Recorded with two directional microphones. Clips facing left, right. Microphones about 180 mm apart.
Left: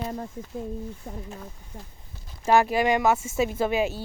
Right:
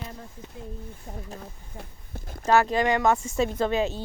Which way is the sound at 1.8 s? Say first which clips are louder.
Right 6 dB; 50° right (ahead or behind).